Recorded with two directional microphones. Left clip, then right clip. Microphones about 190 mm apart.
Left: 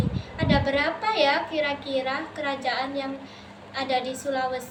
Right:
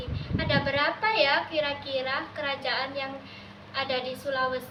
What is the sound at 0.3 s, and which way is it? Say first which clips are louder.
Child singing: left 2 dB; 20° left (ahead or behind).